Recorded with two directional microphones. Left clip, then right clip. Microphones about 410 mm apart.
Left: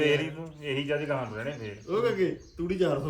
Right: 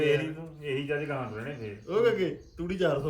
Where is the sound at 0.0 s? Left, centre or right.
Centre.